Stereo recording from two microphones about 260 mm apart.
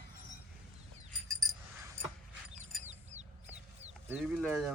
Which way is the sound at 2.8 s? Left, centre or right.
Right.